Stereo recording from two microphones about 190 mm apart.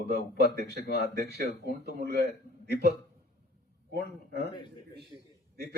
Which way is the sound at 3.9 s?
60° right (ahead or behind).